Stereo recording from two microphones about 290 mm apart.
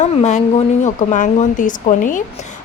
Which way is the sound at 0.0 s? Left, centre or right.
Left.